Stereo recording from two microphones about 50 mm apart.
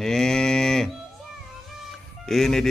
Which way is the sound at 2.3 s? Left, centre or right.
Centre.